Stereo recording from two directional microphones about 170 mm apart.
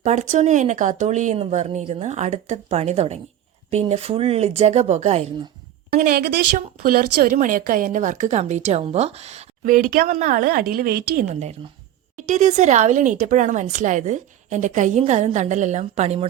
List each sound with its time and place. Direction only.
0.0 s a woman's voice: 45° right (ahead or behind)
5.9 s a woman's voice: 65° right (ahead or behind)
6.8 s a woman's voice: 60° right (ahead or behind)
12.1 s a woman's voice: 45° right (ahead or behind)